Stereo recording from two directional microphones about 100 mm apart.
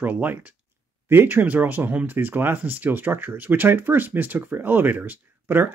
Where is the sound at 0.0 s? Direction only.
15° right (ahead or behind).